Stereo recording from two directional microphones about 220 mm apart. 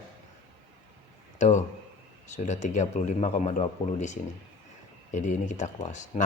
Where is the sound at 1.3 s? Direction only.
35° left (ahead or behind).